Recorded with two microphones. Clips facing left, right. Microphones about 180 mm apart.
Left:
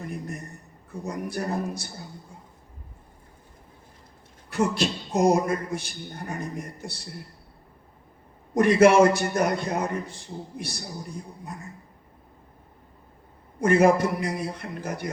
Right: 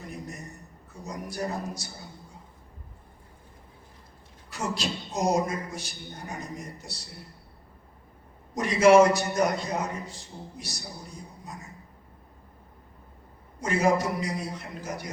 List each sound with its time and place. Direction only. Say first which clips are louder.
1.0 s a man's voice: left 3 dB; 55° left (ahead or behind)
4.4 s a man's voice: left 7 dB; 60° left (ahead or behind)
8.5 s a man's voice: left 1 dB; 55° left (ahead or behind)
13.6 s a man's voice: left 6 dB; 55° left (ahead or behind)